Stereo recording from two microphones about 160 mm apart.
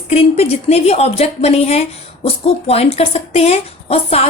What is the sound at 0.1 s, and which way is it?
A woman's voice, 40° left (ahead or behind).